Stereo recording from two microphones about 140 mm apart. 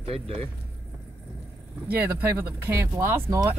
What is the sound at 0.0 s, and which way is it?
Speech, 45° right (ahead or behind).